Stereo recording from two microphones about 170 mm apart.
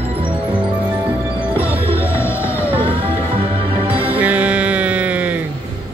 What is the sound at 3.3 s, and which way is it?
Music, 30° right (ahead or behind).